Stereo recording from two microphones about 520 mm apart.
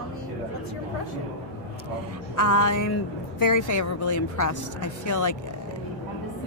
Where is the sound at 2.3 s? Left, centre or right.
Left.